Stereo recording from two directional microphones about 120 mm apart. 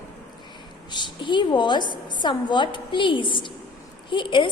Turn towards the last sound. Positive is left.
turn(degrees=45)  # may be behind; listen again after turning